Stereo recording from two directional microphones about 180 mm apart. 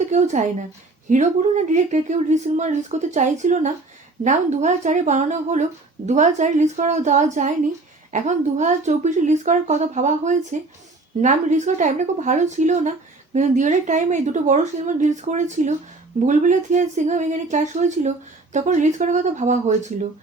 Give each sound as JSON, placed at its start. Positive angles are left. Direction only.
{"t": 0.1, "sound": "speech", "side_deg": -40}